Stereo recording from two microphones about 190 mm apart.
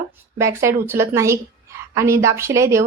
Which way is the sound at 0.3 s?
15° right (ahead or behind).